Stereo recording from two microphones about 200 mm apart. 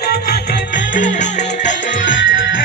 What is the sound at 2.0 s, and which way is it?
Music, 70° left (ahead or behind).